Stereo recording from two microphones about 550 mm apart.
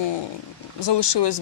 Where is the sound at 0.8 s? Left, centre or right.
Left.